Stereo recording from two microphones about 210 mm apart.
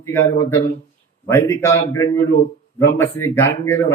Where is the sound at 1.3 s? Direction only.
10° left (ahead or behind).